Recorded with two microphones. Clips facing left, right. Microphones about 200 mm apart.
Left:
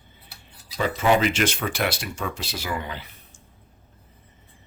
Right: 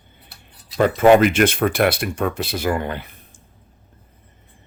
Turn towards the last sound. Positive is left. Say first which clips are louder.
# right 7 dB
turn(degrees=-55)  # may be behind; listen again after turning